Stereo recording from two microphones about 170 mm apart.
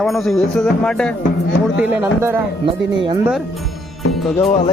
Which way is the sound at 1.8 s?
15° right (ahead or behind).